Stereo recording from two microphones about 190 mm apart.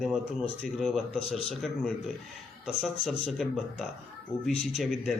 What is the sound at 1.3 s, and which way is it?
Speech, 30° left (ahead or behind).